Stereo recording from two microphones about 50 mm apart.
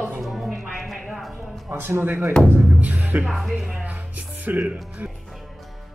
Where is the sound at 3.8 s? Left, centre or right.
Right.